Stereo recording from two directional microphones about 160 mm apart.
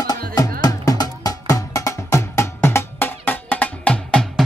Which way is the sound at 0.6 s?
25° left (ahead or behind).